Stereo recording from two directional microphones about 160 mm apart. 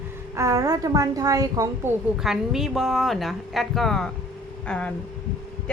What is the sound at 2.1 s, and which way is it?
A woman's voice, centre (ahead or behind).